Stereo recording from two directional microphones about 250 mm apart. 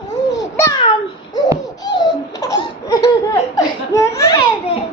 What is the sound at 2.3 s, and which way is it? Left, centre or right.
Laughter, centre.